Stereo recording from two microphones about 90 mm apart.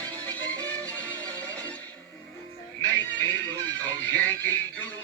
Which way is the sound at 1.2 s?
40° right (ahead or behind).